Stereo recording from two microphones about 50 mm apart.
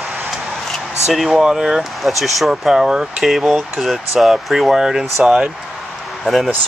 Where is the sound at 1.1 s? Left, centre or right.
Centre.